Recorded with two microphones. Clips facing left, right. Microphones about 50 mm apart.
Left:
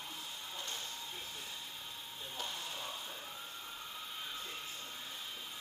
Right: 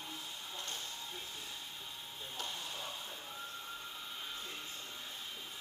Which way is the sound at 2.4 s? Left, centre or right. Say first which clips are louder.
Even; centre.